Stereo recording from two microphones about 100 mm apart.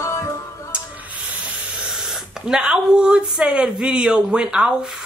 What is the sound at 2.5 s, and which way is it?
Speech, 10° right (ahead or behind).